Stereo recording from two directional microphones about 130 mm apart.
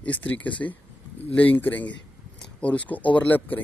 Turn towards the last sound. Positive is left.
turn(degrees=10)  # may be behind; listen again after turning